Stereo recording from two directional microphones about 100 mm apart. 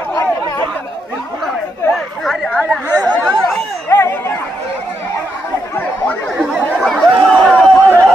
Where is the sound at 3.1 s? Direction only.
10° left (ahead or behind).